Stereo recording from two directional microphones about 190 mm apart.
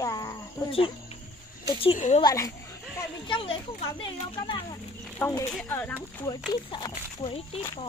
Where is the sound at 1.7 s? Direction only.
30° left (ahead or behind).